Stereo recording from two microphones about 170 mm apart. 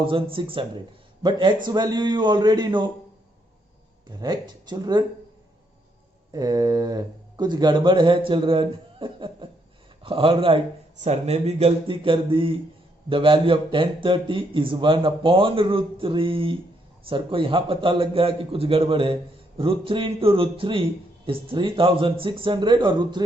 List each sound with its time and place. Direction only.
0.0 s a man's voice: 30° right (ahead or behind)
4.2 s speech: 25° right (ahead or behind)
6.3 s a man's voice: 20° right (ahead or behind)